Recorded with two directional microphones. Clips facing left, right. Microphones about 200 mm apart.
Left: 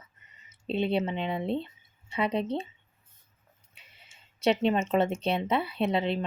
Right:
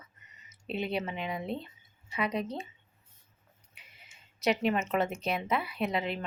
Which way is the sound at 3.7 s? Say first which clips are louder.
Even; 30° left (ahead or behind).